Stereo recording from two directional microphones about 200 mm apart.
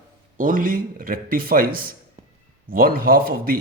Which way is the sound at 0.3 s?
40° right (ahead or behind).